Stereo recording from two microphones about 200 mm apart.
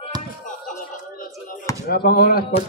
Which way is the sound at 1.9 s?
50° left (ahead or behind).